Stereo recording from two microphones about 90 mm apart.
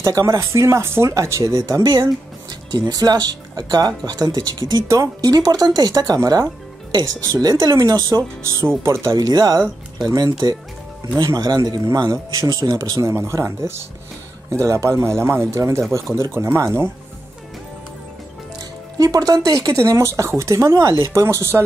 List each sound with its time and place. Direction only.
0.0 s speech: 35° right (ahead or behind)
1.9 s speech: 55° right (ahead or behind)
4.8 s speech: 30° right (ahead or behind)
5.2 s speech: 45° right (ahead or behind)
8.5 s speech: 30° right (ahead or behind)
9.1 s speech: 50° right (ahead or behind)
11.8 s speech: 40° right (ahead or behind)
18.6 s speech: 45° right (ahead or behind)